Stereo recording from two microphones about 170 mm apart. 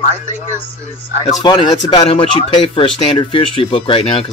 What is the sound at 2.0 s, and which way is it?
Speech, 35° left (ahead or behind).